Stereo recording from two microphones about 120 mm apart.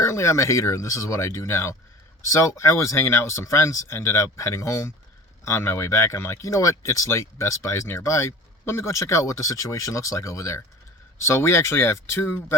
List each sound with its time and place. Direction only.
0.0 s speech: 25° left (ahead or behind)